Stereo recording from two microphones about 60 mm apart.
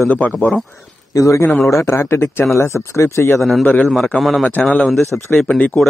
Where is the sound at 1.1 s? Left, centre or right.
Left.